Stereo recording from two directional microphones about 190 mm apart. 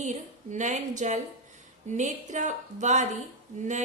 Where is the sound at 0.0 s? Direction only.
40° right (ahead or behind).